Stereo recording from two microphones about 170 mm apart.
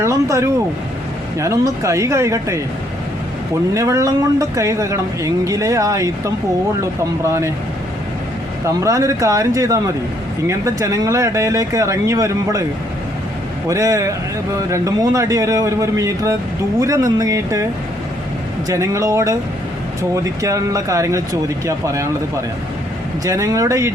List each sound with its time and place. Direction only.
0.0 s speech: 20° right (ahead or behind)
3.8 s speech: 20° right (ahead or behind)
8.6 s speech: 20° right (ahead or behind)
13.7 s speech: 20° right (ahead or behind)
18.7 s speech: 20° right (ahead or behind)